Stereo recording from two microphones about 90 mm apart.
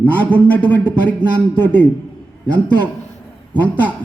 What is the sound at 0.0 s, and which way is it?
Speech, 20° left (ahead or behind).